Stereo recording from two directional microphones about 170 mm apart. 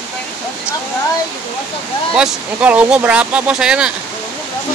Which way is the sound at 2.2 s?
10° right (ahead or behind).